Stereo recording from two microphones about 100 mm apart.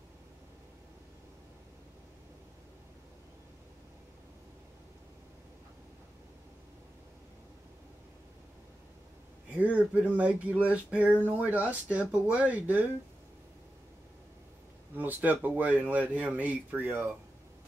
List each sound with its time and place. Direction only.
9.5 s speech: 15° right (ahead or behind)
15.0 s speech: 15° right (ahead or behind)